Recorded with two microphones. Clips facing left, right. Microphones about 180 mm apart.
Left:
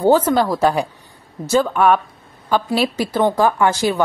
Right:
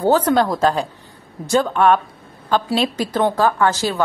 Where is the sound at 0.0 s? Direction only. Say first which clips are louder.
Left 1 dB; 10° left (ahead or behind).